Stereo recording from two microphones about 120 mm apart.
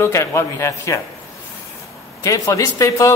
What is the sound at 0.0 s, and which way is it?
A man's voice, 20° left (ahead or behind).